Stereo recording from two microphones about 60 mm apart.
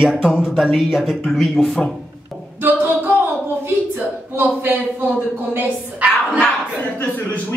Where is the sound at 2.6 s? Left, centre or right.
Right.